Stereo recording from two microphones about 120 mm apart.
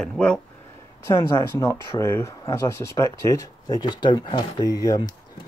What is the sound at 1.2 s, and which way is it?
Speech, 30° left (ahead or behind).